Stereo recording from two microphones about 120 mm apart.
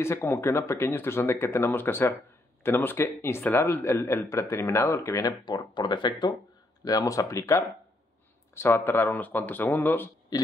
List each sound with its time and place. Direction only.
0.0 s a man's voice: 20° left (ahead or behind)
5.4 s speech: 40° left (ahead or behind)
6.8 s a man's voice: 30° left (ahead or behind)